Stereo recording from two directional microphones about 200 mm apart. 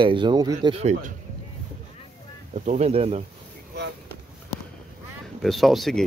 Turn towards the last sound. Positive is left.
turn(degrees=0)  # may be behind; listen again after turning